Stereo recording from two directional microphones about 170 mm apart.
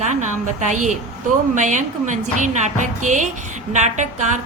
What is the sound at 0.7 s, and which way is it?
A woman's voice, 45° right (ahead or behind).